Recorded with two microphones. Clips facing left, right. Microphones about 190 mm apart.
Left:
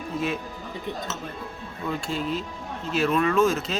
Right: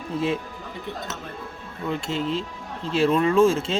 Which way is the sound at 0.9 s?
15° left (ahead or behind).